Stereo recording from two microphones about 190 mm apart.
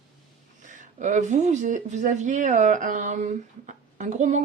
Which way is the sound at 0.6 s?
40° right (ahead or behind).